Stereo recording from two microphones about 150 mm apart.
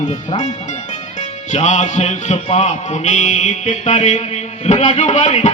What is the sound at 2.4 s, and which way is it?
Music, 50° left (ahead or behind).